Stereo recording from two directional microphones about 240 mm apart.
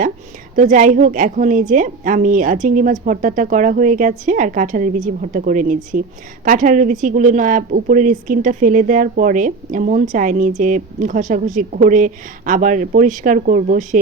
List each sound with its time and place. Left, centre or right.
0.5 s a woman's voice: right